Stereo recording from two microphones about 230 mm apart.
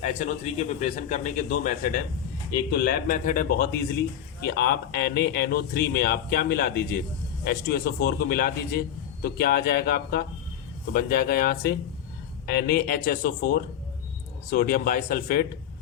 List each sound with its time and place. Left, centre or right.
0.0 s a man's voice: left